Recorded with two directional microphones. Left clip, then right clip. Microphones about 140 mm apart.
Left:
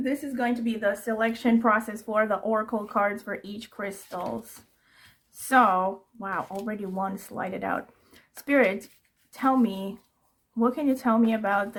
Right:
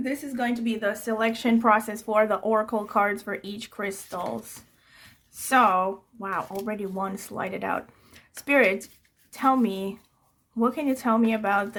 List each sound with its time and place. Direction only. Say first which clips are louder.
0.0 s a woman's voice: left 1 dB; 20° right (ahead or behind)
5.5 s speech: even; 25° right (ahead or behind)